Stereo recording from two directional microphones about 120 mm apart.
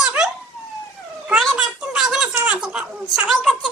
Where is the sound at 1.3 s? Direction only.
5° right (ahead or behind).